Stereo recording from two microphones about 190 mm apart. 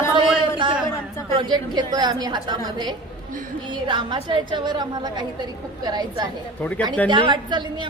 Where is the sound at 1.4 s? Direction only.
25° right (ahead or behind).